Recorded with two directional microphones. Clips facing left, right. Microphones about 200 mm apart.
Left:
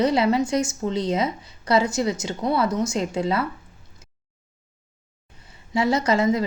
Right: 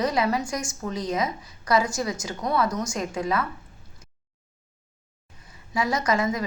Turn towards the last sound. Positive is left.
turn(degrees=25)  # may be behind; listen again after turning